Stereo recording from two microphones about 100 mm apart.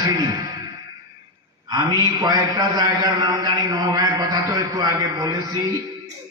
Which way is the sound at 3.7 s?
40° right (ahead or behind).